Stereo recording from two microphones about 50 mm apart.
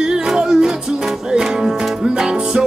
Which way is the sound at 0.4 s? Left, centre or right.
Centre.